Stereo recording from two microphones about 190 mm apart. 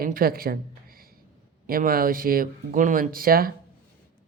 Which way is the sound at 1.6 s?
50° right (ahead or behind).